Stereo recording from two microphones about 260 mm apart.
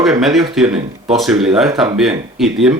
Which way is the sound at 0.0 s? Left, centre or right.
Centre.